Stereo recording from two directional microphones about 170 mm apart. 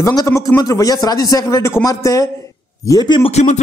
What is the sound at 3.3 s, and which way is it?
Speech, 40° left (ahead or behind).